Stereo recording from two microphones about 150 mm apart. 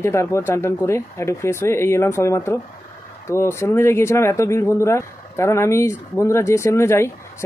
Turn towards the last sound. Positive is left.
turn(degrees=15)  # may be behind; listen again after turning